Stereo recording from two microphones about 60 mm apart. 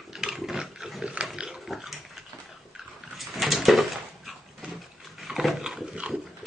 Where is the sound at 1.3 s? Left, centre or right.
Centre.